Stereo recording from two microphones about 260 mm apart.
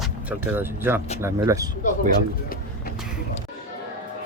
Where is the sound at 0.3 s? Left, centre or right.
Centre.